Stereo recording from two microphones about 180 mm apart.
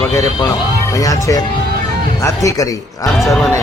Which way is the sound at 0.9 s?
20° left (ahead or behind).